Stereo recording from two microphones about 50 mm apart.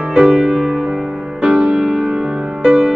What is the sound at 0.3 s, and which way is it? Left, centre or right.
Music, centre.